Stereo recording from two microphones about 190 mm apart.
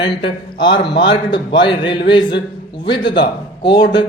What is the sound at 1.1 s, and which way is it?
A man's voice, 25° left (ahead or behind).